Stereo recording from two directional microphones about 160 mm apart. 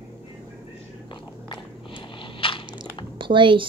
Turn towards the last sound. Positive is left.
turn(degrees=-30)  # may be behind; listen again after turning